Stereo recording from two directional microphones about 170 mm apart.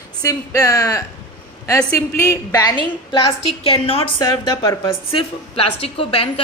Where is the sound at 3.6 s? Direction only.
35° left (ahead or behind).